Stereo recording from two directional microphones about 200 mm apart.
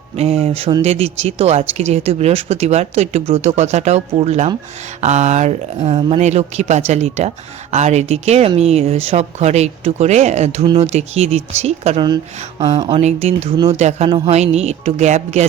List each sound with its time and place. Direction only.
0.2 s speech: 30° right (ahead or behind)